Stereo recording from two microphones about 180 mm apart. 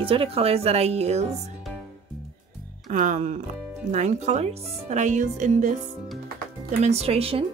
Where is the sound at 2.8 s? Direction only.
45° right (ahead or behind).